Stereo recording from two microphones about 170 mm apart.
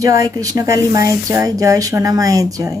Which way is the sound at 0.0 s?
20° right (ahead or behind).